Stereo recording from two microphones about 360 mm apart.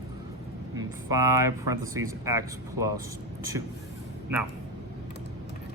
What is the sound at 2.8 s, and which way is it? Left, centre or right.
Speech, right.